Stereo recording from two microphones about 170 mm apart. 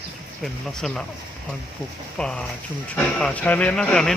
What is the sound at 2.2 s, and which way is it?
Speech, 5° left (ahead or behind).